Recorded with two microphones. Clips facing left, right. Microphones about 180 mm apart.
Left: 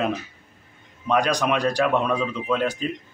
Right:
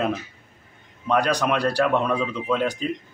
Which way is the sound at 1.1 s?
10° left (ahead or behind).